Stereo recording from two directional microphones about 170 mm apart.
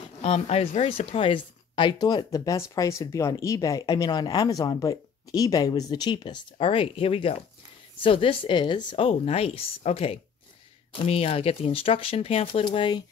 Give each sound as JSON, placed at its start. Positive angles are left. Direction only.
{"t": 0.2, "sound": "speech", "side_deg": 35}